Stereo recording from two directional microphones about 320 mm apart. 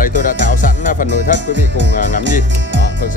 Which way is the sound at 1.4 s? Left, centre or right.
Right.